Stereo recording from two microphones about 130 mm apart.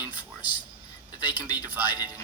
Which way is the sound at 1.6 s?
15° right (ahead or behind).